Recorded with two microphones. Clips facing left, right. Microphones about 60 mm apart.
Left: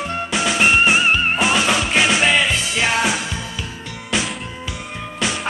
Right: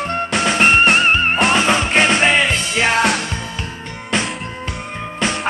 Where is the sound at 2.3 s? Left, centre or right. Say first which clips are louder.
Right 2 dB; centre.